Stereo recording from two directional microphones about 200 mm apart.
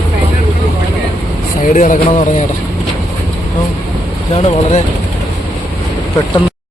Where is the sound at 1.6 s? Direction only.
40° left (ahead or behind).